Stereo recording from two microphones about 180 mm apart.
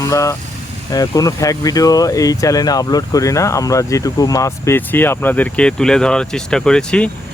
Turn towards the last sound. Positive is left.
turn(degrees=5)  # may be behind; listen again after turning